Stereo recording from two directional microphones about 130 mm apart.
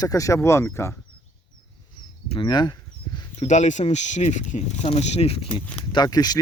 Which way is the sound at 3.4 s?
70° left (ahead or behind).